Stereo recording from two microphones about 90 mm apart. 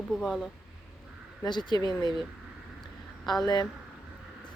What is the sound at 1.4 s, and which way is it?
Speech, 55° left (ahead or behind).